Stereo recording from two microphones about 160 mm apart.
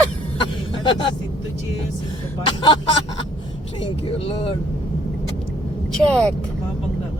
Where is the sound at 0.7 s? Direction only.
30° left (ahead or behind).